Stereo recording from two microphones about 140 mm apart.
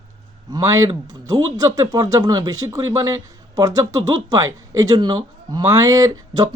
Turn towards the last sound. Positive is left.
turn(degrees=-25)  # may be behind; listen again after turning